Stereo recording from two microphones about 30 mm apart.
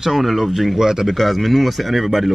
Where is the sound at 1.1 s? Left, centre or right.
Centre.